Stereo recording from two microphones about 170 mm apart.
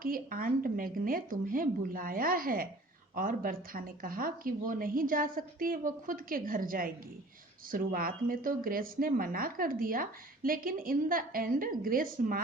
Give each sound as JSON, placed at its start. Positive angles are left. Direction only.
{"t": 0.0, "sound": "speech", "side_deg": -55}